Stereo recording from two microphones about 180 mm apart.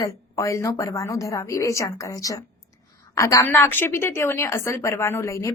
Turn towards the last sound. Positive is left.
turn(degrees=15)  # may be behind; listen again after turning